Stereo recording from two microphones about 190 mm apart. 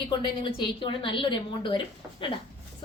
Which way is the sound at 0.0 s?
25° left (ahead or behind).